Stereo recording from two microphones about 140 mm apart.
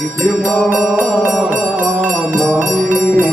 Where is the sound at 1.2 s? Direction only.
10° right (ahead or behind).